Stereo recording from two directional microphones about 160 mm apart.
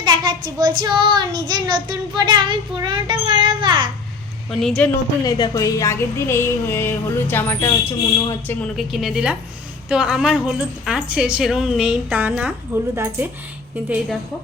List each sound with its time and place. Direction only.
0.0 s child singing: 30° right (ahead or behind)
4.6 s a woman's voice: 5° left (ahead or behind)
5.2 s speech: 25° left (ahead or behind)
8.7 s a woman's voice: centre (ahead or behind)